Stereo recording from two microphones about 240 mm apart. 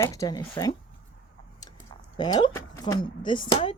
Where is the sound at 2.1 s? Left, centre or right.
Centre.